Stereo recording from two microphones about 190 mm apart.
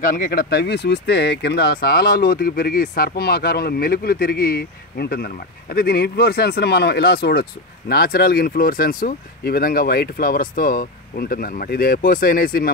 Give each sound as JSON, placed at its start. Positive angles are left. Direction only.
{"t": 0.0, "sound": "speech", "side_deg": 45}